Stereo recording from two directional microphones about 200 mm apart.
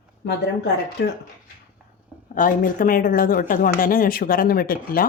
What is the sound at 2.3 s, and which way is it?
Speech, 45° left (ahead or behind).